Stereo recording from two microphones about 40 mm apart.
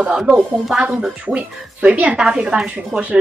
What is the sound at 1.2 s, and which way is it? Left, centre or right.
A woman's voice, right.